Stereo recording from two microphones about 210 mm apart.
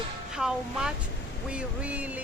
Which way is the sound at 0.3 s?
5° right (ahead or behind).